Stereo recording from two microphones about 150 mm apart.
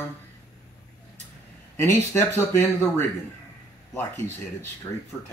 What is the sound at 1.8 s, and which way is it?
Speech, 15° left (ahead or behind).